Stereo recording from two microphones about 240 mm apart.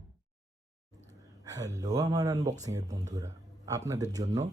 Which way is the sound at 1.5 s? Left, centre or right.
Centre.